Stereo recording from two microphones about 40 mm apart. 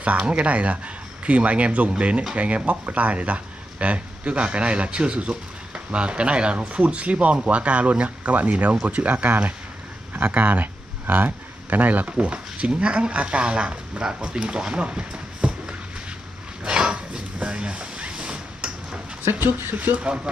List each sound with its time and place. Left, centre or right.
0.3 s speech: right
16.6 s dog: right
17.4 s a sound: right